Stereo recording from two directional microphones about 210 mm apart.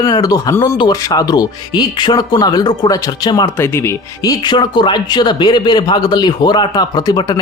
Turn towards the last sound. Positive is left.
turn(degrees=20)  # may be behind; listen again after turning